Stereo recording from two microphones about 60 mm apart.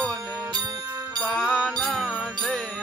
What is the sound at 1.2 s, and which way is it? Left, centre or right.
Music, centre.